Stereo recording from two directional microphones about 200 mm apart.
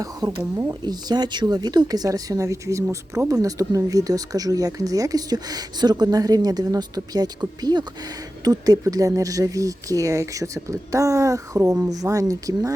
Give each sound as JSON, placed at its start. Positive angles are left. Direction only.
{"t": 0.0, "sound": "speech", "side_deg": -20}